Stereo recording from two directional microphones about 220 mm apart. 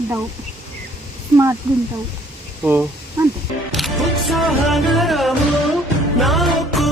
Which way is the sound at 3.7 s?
Centre (ahead or behind).